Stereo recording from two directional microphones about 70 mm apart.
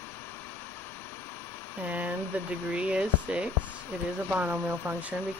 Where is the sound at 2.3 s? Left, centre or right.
Right.